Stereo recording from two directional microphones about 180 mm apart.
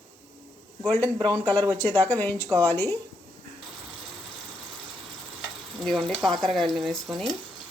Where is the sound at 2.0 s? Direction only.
10° left (ahead or behind).